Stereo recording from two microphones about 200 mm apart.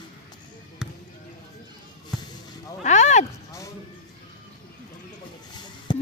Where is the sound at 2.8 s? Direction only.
35° left (ahead or behind).